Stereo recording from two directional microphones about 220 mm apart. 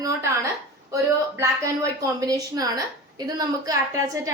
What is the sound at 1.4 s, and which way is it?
A woman's voice, 15° right (ahead or behind).